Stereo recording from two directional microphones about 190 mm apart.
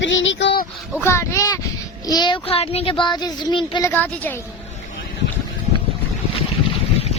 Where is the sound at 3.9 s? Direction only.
10° left (ahead or behind).